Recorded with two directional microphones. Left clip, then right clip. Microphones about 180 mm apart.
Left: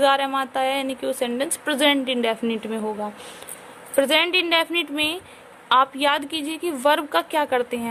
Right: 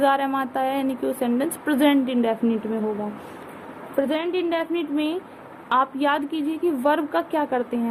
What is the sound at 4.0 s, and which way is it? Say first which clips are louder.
A woman's voice: left 5 dB; 50° left (ahead or behind).